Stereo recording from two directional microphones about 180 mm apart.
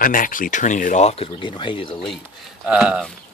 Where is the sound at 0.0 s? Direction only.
50° left (ahead or behind); by 2.0 s 30° left (ahead or behind).